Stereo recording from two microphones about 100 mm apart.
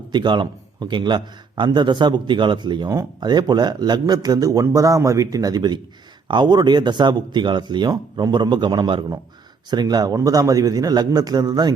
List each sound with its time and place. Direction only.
0.1 s a man's voice: 50° right (ahead or behind)